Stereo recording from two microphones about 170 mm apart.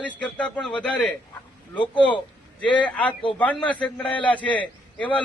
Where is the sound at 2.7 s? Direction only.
10° left (ahead or behind).